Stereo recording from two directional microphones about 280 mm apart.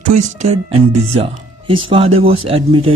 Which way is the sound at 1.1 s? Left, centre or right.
Centre.